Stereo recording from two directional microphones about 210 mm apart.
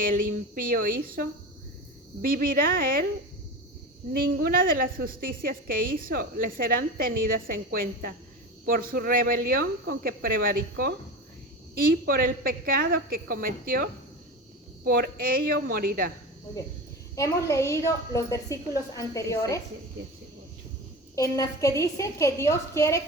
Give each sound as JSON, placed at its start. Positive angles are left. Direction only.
{"t": 0.0, "sound": "a woman's voice", "side_deg": -40}
{"t": 2.3, "sound": "a woman's voice", "side_deg": -45}
{"t": 4.1, "sound": "a woman's voice", "side_deg": -45}
{"t": 12.0, "sound": "a woman's voice", "side_deg": -45}
{"t": 17.2, "sound": "a woman's voice", "side_deg": 15}
{"t": 21.2, "sound": "a woman's voice", "side_deg": 15}